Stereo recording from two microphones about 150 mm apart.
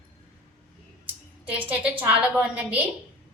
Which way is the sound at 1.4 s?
10° right (ahead or behind).